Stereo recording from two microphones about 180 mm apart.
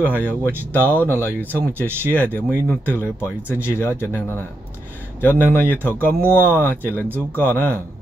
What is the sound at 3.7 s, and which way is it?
Speech, 15° left (ahead or behind).